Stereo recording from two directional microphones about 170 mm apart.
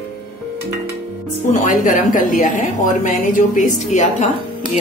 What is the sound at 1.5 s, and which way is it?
A woman's voice, 50° left (ahead or behind).